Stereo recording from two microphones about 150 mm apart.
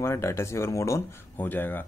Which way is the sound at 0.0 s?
20° left (ahead or behind).